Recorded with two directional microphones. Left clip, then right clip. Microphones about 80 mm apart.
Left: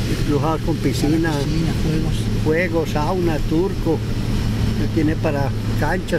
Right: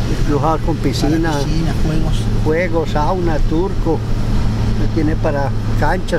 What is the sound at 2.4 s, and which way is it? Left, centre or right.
Speech, centre.